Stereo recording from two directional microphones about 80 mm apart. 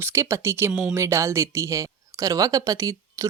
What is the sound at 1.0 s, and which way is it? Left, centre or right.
A woman's voice, right.